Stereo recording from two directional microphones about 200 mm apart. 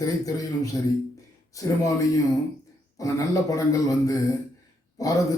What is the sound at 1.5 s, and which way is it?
A man's voice, 15° left (ahead or behind).